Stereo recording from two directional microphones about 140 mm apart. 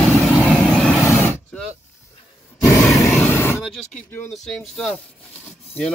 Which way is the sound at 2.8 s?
Centre (ahead or behind).